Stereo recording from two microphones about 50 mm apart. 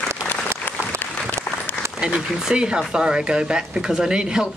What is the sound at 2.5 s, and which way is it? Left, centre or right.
Speech, centre.